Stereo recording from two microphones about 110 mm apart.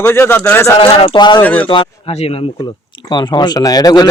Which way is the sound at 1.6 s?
50° left (ahead or behind).